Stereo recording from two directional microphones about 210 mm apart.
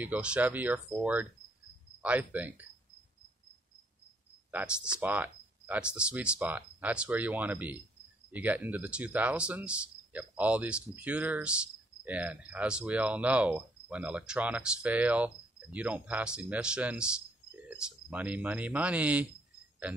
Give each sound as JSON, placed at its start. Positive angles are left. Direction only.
{"t": 0.0, "sound": "speech", "side_deg": -5}
{"t": 4.5, "sound": "speech", "side_deg": -10}